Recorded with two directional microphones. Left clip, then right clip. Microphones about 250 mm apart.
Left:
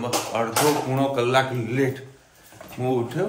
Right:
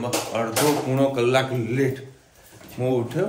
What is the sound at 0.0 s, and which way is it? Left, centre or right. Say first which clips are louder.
Speech: left 1 dB; centre.